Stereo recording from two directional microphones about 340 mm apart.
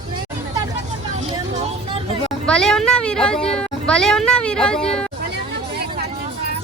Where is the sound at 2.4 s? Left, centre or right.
Centre.